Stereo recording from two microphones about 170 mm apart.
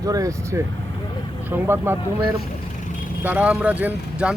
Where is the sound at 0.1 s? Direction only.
20° right (ahead or behind).